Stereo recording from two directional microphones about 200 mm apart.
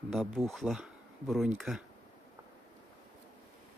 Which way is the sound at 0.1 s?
Centre (ahead or behind).